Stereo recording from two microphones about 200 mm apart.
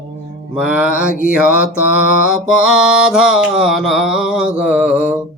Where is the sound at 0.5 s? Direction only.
5° right (ahead or behind).